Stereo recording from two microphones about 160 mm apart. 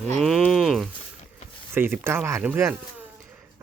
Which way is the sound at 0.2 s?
Centre (ahead or behind).